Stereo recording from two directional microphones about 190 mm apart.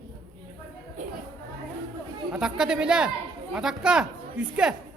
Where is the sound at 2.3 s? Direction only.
5° right (ahead or behind).